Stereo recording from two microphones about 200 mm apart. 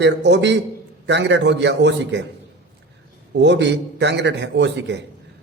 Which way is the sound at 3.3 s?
60° right (ahead or behind).